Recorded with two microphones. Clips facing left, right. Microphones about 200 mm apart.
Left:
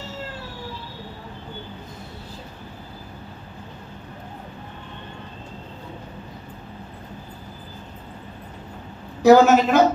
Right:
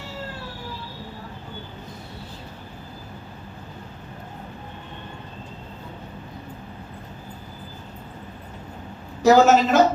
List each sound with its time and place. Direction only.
9.2 s a man's voice: 55° left (ahead or behind)